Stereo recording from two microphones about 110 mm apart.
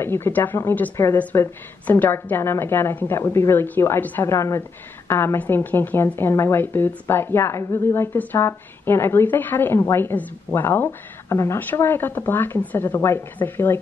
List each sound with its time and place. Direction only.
0.0 s a woman's voice: 20° left (ahead or behind)